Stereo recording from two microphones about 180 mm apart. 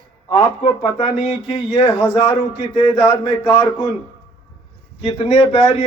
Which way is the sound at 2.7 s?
25° left (ahead or behind).